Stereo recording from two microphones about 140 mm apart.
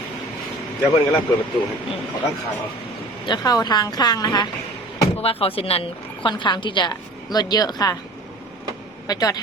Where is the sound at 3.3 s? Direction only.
30° left (ahead or behind).